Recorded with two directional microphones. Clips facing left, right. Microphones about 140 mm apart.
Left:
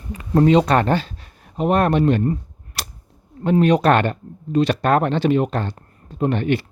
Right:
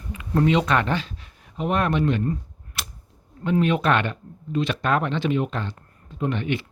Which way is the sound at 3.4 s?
40° left (ahead or behind).